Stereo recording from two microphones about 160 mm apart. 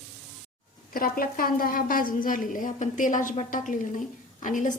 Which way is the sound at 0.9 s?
65° left (ahead or behind).